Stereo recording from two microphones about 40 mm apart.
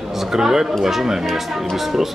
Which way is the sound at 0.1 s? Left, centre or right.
Centre.